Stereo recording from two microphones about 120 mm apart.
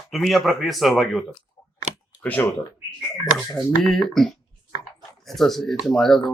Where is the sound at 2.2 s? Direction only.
15° left (ahead or behind).